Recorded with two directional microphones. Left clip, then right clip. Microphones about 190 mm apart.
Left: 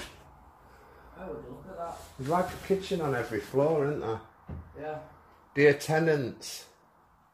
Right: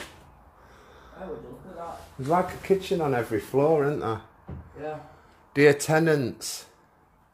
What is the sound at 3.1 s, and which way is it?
Speech, 35° right (ahead or behind).